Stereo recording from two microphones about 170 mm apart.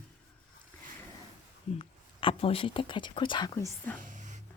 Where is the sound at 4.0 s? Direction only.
50° right (ahead or behind).